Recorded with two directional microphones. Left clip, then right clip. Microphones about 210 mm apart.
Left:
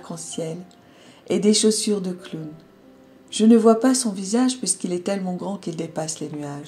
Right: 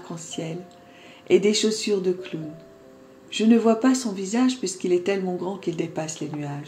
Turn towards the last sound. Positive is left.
turn(degrees=45)  # may be behind; listen again after turning